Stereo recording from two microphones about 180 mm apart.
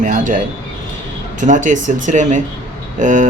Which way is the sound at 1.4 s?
45° right (ahead or behind).